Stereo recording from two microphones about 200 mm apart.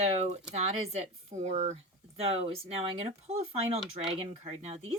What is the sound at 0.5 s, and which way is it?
Speech, 35° right (ahead or behind).